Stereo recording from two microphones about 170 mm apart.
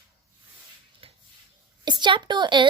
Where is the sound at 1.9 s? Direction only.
25° right (ahead or behind).